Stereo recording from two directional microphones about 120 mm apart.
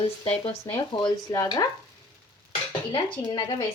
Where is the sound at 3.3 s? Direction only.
35° left (ahead or behind).